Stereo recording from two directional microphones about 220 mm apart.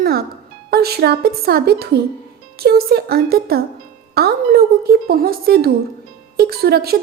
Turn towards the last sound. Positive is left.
turn(degrees=-45)  # may be behind; listen again after turning